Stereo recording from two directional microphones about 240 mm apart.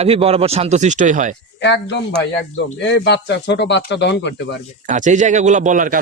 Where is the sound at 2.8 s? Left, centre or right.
Left.